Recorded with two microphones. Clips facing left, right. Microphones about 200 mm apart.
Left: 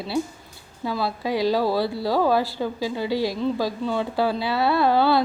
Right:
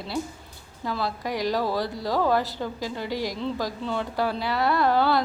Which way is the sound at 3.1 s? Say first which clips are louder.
Left 5 dB; 15° right (ahead or behind).